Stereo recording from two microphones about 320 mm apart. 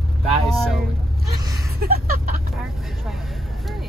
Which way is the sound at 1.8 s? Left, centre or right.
Right.